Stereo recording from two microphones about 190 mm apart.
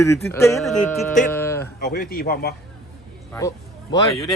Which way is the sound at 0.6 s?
Centre (ahead or behind).